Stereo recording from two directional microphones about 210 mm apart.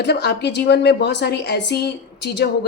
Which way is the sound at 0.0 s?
55° left (ahead or behind).